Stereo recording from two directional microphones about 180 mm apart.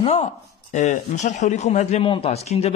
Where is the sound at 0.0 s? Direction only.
35° left (ahead or behind).